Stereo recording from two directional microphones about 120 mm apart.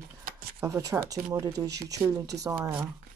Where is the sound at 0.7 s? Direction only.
30° right (ahead or behind).